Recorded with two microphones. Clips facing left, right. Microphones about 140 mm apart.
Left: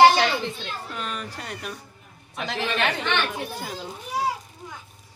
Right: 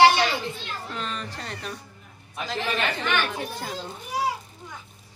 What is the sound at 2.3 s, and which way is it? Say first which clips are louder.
Speech: left 1 dB; 75° left (ahead or behind).